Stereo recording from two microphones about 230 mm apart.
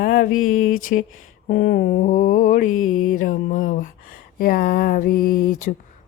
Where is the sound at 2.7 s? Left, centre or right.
Left.